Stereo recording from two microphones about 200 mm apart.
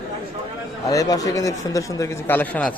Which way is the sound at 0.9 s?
15° left (ahead or behind).